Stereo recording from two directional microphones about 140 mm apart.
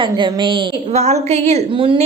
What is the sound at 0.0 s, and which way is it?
A woman's voice, 35° right (ahead or behind).